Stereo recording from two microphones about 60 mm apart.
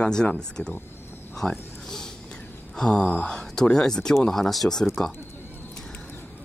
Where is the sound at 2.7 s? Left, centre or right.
Centre.